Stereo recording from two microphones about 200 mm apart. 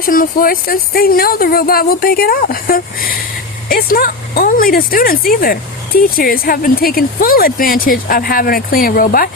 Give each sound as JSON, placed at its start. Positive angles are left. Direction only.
{"t": 0.0, "sound": "speech", "side_deg": 45}